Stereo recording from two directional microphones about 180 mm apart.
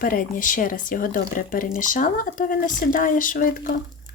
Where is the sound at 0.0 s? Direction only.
50° left (ahead or behind).